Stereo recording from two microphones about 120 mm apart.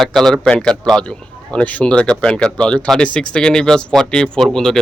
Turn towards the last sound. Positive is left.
turn(degrees=5)  # may be behind; listen again after turning